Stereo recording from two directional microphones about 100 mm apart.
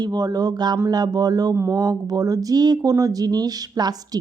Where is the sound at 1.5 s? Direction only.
25° right (ahead or behind).